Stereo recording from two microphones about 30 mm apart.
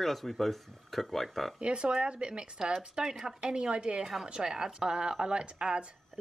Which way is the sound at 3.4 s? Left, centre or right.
Right.